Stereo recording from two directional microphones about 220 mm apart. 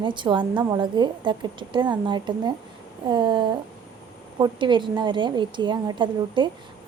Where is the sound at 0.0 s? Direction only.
20° right (ahead or behind).